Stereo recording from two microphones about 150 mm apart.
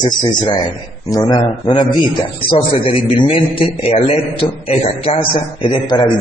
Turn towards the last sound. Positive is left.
turn(degrees=30)  # may be behind; listen again after turning